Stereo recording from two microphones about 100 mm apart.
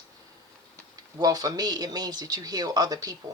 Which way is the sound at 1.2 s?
40° right (ahead or behind).